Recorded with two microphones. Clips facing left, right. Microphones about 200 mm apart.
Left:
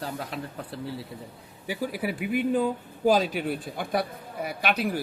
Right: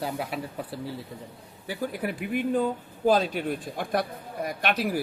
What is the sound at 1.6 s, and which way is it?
Speech, 10° left (ahead or behind).